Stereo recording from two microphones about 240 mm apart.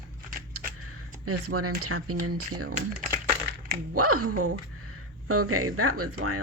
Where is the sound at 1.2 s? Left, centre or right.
Right.